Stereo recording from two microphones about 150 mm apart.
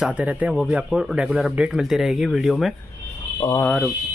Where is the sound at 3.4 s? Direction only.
20° left (ahead or behind).